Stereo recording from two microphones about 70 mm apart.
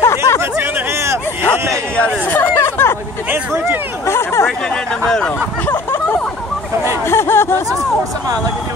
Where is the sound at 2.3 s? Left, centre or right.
Left.